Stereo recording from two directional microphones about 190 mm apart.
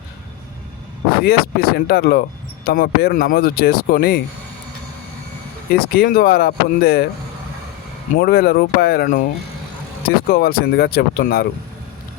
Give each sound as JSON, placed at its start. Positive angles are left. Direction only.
{"t": 1.2, "sound": "speech", "side_deg": 55}
{"t": 5.7, "sound": "speech", "side_deg": 50}
{"t": 8.1, "sound": "speech", "side_deg": 50}